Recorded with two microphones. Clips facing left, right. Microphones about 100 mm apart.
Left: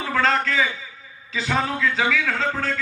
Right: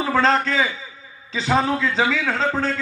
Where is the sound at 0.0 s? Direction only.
25° right (ahead or behind).